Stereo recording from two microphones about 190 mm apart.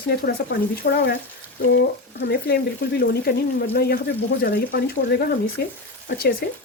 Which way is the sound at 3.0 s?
55° left (ahead or behind).